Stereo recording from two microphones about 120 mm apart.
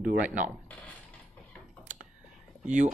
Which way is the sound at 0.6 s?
10° left (ahead or behind).